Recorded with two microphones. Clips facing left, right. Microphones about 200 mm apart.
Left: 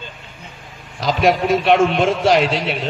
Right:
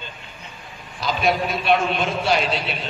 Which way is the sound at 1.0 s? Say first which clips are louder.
Left 5 dB; 90° left.